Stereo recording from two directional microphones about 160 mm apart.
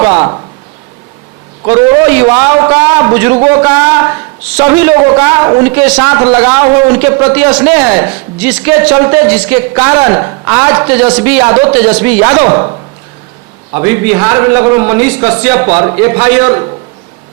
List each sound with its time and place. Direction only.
0.0 s a man's voice: 15° right (ahead or behind)
1.6 s a man's voice: 15° right (ahead or behind)
10.2 s a woman's voice: 20° right (ahead or behind)
10.5 s a man's voice: 10° right (ahead or behind)
13.7 s a man's voice: 15° right (ahead or behind)